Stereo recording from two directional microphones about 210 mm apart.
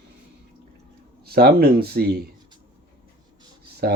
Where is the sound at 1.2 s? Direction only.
50° right (ahead or behind).